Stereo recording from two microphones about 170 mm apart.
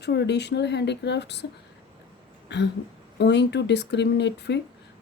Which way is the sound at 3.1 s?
90° left.